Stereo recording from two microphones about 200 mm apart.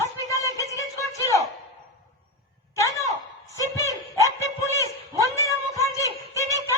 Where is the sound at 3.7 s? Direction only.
15° left (ahead or behind).